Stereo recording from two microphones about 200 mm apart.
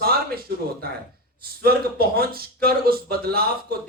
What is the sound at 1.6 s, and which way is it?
Speech, 50° right (ahead or behind).